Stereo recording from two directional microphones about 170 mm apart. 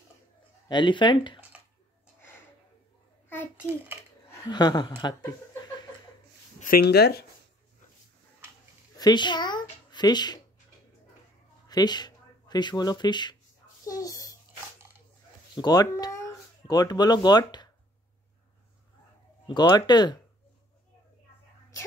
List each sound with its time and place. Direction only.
0.7 s speech: 25° left (ahead or behind)
4.3 s speech: 25° left (ahead or behind)
6.6 s speech: 65° left (ahead or behind)
8.9 s speech: 25° left (ahead or behind)
11.6 s speech: 25° left (ahead or behind)
13.8 s a sound: 20° left (ahead or behind)
15.5 s speech: 25° left (ahead or behind)
19.4 s speech: 25° left (ahead or behind)